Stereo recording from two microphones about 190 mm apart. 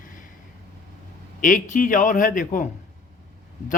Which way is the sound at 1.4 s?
45° left (ahead or behind).